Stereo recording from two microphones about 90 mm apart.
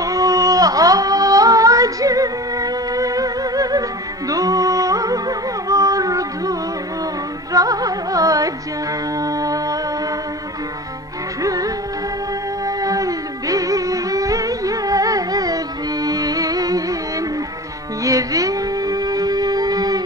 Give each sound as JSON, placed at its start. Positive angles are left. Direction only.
{"t": 0.0, "sound": "singing", "side_deg": -40}
{"t": 4.3, "sound": "music", "side_deg": -40}
{"t": 7.5, "sound": "music", "side_deg": -40}
{"t": 11.4, "sound": "music", "side_deg": -40}
{"t": 18.0, "sound": "music", "side_deg": -40}